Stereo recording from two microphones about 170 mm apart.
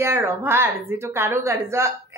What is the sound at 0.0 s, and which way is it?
A woman's voice, 15° right (ahead or behind).